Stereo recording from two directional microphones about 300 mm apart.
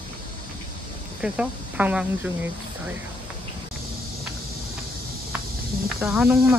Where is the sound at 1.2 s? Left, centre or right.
Centre.